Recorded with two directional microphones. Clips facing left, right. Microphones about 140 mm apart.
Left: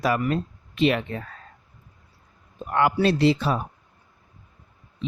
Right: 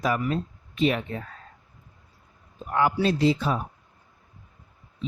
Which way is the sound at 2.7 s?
70° left (ahead or behind).